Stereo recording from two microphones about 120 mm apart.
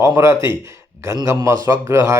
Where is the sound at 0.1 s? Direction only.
25° right (ahead or behind).